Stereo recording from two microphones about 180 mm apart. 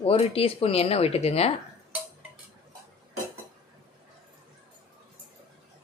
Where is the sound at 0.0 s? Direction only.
35° left (ahead or behind).